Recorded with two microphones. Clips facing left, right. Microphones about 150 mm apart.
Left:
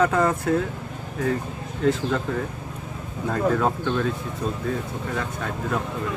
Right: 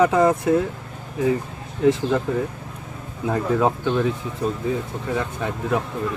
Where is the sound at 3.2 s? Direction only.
15° right (ahead or behind).